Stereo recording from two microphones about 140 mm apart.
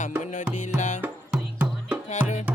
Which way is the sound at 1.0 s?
5° right (ahead or behind).